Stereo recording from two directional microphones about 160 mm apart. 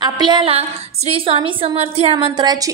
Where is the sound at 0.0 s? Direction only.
30° right (ahead or behind).